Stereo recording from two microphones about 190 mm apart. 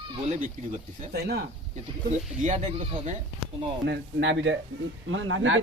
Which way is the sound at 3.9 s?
65° right (ahead or behind).